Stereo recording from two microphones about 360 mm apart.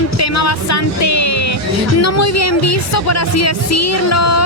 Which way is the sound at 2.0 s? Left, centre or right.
Left.